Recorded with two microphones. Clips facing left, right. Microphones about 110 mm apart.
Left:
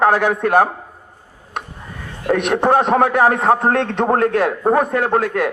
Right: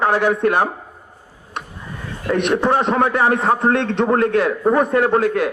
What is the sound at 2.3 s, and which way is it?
A man's voice, 50° left (ahead or behind).